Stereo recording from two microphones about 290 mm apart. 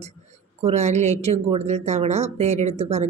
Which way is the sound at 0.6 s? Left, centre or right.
Right.